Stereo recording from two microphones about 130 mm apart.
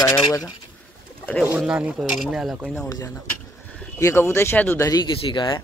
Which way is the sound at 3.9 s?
20° left (ahead or behind).